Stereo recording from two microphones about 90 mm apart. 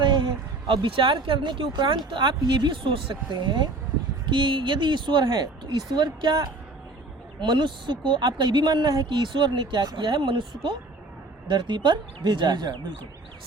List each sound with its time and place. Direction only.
0.0 s speech: 65° right (ahead or behind)
11.4 s speech: 60° right (ahead or behind)